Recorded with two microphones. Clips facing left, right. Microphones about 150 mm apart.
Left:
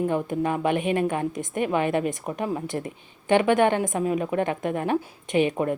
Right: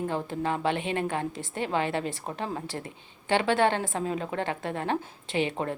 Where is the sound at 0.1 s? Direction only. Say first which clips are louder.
Left 5 dB; 15° left (ahead or behind).